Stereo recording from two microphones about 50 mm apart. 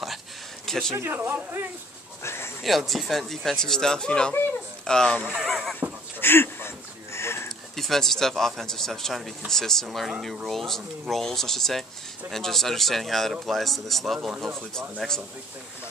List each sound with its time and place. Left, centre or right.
0.7 s speech: centre
0.9 s a man's voice: right
2.2 s a sound: left
2.6 s speech: centre
5.4 s a man's voice: centre
6.1 s a sound: left
7.7 s a man's voice: centre
15.0 s speech: centre